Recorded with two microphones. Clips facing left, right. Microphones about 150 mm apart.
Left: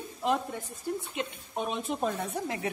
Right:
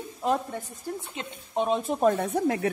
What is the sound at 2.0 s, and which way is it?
Speech, 55° right (ahead or behind).